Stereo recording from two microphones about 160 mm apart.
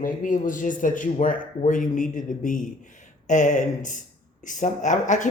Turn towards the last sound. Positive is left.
turn(degrees=50)  # may be behind; listen again after turning